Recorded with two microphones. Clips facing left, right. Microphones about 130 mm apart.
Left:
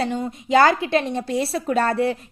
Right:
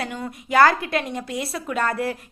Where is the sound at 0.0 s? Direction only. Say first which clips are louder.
Left 6 dB; 25° left (ahead or behind).